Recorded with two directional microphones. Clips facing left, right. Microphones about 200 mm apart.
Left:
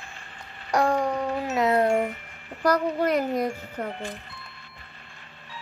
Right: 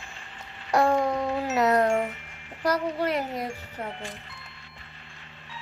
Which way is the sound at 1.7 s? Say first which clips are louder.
Left 2 dB; 35° left (ahead or behind).